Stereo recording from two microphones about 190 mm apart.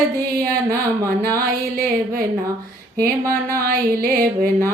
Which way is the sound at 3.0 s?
50° right (ahead or behind).